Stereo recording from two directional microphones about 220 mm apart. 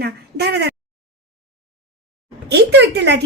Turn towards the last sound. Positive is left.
turn(degrees=-50)  # may be behind; listen again after turning